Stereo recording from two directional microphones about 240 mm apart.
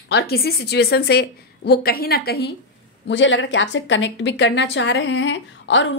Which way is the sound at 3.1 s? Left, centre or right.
Left.